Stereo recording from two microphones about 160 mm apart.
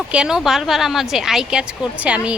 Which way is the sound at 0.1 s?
5° right (ahead or behind).